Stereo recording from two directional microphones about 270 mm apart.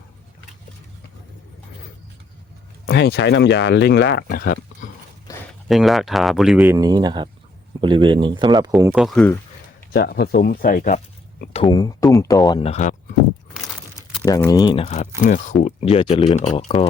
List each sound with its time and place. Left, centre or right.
2.8 s speech: left
5.3 s a sound: centre
5.6 s speech: centre
8.7 s speech: centre
9.9 s speech: left
11.6 s speech: centre
14.3 s speech: centre